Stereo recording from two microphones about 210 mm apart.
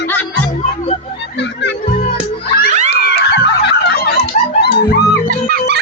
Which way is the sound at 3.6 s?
50° left (ahead or behind).